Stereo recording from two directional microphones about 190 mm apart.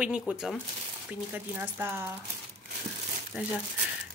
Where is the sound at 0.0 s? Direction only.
5° right (ahead or behind).